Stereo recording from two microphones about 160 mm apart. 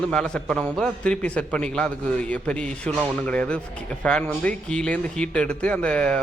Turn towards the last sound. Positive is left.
turn(degrees=5)  # may be behind; listen again after turning